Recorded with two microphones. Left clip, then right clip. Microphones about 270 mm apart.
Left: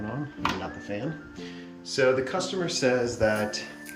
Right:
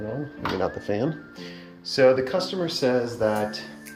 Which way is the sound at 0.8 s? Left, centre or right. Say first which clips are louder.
Right 7 dB; centre.